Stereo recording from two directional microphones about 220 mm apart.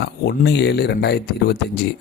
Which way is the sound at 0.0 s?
50° left (ahead or behind).